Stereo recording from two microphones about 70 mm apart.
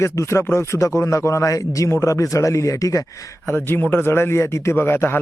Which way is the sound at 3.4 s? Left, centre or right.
Left.